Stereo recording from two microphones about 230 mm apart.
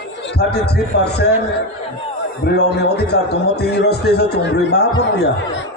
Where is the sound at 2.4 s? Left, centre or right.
Left.